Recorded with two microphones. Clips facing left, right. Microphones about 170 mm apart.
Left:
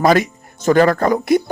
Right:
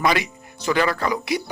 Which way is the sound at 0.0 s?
45° left (ahead or behind).